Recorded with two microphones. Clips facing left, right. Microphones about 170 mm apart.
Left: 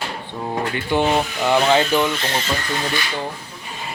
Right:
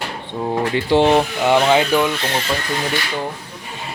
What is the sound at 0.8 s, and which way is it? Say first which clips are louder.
Speech: right 5 dB; 25° right (ahead or behind).